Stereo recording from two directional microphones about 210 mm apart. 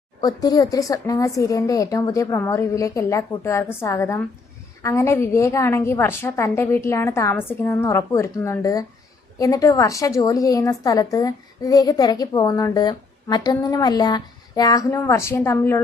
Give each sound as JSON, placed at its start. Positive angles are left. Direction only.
{"t": 0.2, "sound": "a woman's voice", "side_deg": 20}